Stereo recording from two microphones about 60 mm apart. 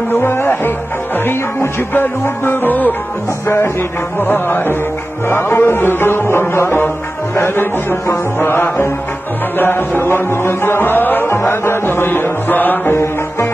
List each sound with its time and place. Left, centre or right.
0.1 s music: left
3.4 s music: left
12.9 s music: left